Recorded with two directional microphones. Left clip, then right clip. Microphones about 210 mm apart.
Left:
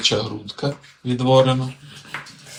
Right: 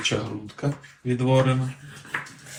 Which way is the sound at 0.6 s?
15° left (ahead or behind).